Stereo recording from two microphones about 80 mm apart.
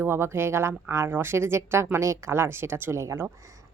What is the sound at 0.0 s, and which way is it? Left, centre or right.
A woman's voice, right.